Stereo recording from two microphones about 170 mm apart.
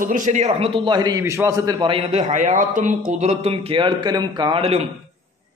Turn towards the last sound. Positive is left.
turn(degrees=-35)  # may be behind; listen again after turning